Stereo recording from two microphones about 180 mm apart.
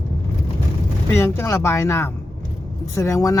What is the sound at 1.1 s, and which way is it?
Speech, 15° left (ahead or behind).